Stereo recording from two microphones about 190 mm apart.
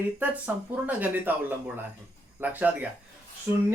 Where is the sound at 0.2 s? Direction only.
10° right (ahead or behind).